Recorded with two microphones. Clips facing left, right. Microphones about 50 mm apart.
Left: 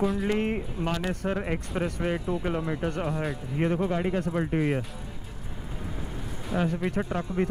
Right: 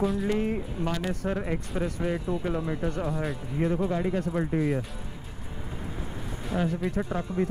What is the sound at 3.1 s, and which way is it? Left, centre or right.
Speech, centre.